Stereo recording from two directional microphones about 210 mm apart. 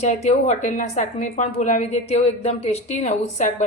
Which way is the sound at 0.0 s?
35° left (ahead or behind).